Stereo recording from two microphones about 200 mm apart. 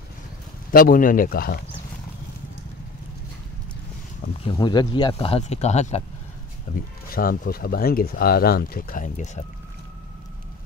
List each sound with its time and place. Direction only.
0.7 s speech: 45° left (ahead or behind)
4.5 s speech: 20° left (ahead or behind)
6.7 s speech: 45° left (ahead or behind)